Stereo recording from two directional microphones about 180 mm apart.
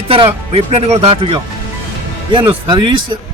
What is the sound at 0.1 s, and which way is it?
A man's voice, 35° right (ahead or behind).